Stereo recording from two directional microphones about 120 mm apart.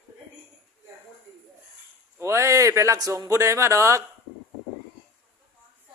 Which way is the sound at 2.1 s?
25° right (ahead or behind).